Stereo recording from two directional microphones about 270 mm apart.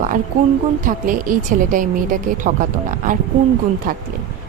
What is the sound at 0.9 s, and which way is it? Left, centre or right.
A woman's voice, right.